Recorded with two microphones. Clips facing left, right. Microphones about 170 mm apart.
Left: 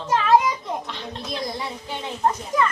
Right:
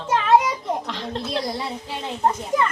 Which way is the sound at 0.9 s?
90° right.